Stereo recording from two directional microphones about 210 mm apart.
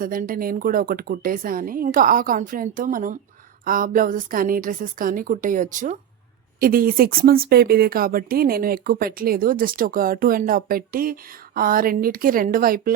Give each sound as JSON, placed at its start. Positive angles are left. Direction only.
{"t": 0.0, "sound": "a woman's voice", "side_deg": -40}